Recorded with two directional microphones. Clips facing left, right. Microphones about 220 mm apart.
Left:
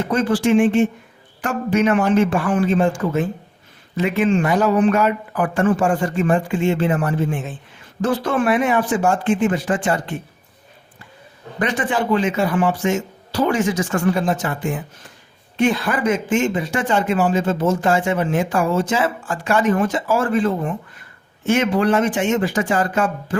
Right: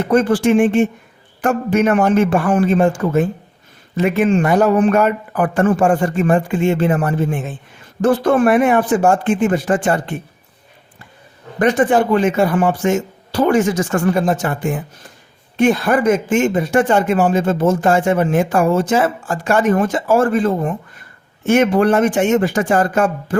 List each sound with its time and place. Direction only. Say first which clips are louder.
0.1 s speech: right 4 dB; 55° right (ahead or behind)
11.6 s speech: right 7 dB; 45° right (ahead or behind)